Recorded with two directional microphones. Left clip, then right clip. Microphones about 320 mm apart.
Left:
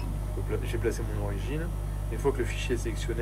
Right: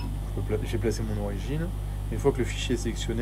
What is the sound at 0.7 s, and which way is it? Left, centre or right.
Speech, right.